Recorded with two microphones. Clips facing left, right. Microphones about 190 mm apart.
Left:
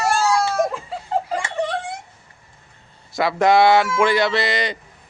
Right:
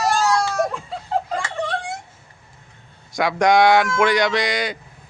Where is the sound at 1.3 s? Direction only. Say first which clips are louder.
Left 2 dB; 20° left (ahead or behind).